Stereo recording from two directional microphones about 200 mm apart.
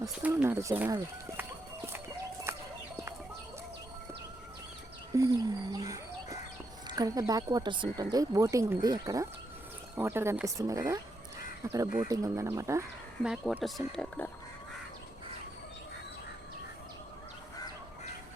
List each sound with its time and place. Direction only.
0.0 s speech: 10° right (ahead or behind)
2.5 s a sound: 15° right (ahead or behind)
5.1 s speech: 20° right (ahead or behind)
13.2 s speech: 5° right (ahead or behind)